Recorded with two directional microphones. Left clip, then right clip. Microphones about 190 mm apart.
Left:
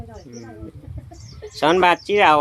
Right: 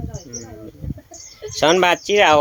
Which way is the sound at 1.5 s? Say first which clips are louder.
Right 1 dB; 15° right (ahead or behind).